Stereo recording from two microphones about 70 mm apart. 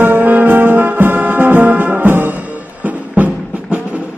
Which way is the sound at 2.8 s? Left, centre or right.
Right.